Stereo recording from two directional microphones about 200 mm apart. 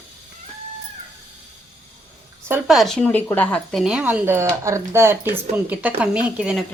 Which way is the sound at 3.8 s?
5° right (ahead or behind).